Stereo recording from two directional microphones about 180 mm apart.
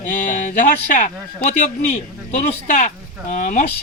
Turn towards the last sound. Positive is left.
turn(degrees=45)  # may be behind; listen again after turning